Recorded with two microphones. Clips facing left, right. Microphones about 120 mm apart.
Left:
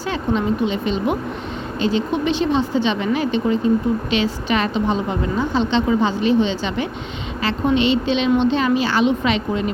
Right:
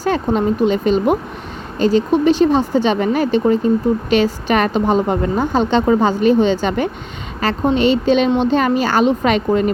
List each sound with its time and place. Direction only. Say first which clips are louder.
0.0 s speech: right 4 dB; 45° right (ahead or behind)